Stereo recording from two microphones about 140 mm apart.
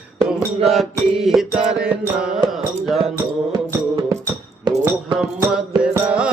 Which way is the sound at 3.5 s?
25° right (ahead or behind).